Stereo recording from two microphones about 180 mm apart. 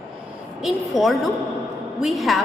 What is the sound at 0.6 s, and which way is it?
A woman's voice, centre (ahead or behind).